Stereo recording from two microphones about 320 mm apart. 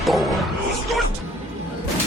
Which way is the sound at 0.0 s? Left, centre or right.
Centre.